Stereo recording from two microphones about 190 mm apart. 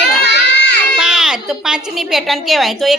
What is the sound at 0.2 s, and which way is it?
Baby cry, 65° left (ahead or behind).